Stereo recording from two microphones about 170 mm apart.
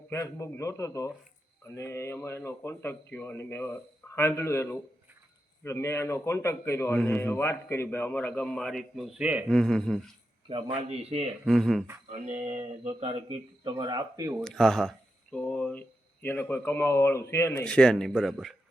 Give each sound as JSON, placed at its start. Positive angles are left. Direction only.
{"t": 0.1, "sound": "a man's voice", "side_deg": 15}
{"t": 10.5, "sound": "speech", "side_deg": -30}
{"t": 11.4, "sound": "speech", "side_deg": 0}
{"t": 12.1, "sound": "speech", "side_deg": -45}
{"t": 14.4, "sound": "a man's voice", "side_deg": 5}